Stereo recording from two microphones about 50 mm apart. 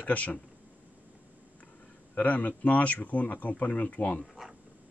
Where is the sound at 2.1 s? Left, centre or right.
Left.